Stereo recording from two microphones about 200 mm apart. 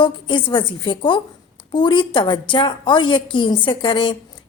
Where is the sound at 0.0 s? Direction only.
25° left (ahead or behind).